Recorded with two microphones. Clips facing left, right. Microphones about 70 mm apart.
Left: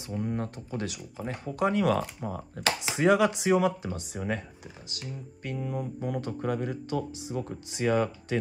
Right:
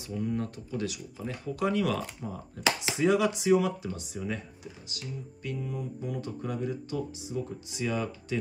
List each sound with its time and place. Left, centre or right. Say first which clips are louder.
0.1 s speech: even; left
2.2 s speech: even; left